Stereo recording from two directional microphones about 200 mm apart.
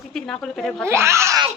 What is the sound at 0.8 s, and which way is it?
Speech, 15° right (ahead or behind).